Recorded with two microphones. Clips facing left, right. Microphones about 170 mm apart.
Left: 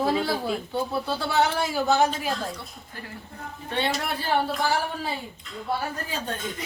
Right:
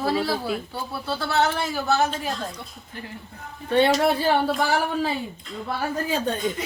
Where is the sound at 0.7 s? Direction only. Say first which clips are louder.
Left 3 dB; 15° left (ahead or behind).